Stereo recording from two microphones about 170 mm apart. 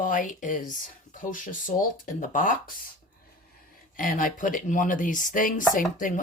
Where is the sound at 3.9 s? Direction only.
55° left (ahead or behind).